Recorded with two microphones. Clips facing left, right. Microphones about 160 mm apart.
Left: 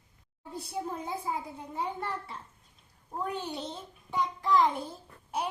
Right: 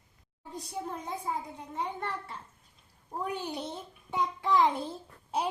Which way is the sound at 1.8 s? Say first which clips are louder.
Left 1 dB; centre (ahead or behind).